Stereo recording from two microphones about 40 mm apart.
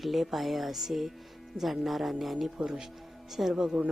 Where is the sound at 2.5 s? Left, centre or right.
Centre.